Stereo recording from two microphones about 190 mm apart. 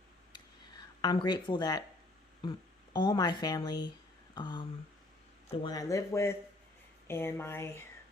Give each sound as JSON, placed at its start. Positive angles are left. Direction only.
{"t": 0.3, "sound": "a sound", "side_deg": 20}
{"t": 1.5, "sound": "speech", "side_deg": 20}
{"t": 2.9, "sound": "speech", "side_deg": 20}